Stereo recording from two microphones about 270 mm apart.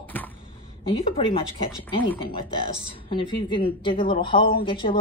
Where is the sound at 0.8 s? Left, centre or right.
Centre.